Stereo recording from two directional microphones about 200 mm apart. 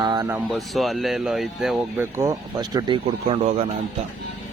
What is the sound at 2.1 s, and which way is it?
Speech, 15° right (ahead or behind).